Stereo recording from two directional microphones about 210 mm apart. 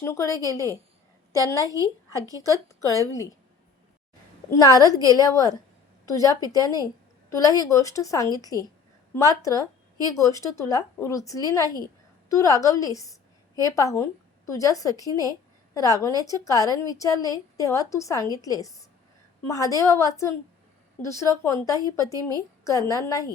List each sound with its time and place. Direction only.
0.0 s a woman's voice: 15° left (ahead or behind)
2.1 s a woman's voice: 15° right (ahead or behind)
2.4 s a woman's voice: 15° left (ahead or behind)
4.4 s a woman's voice: 15° left (ahead or behind)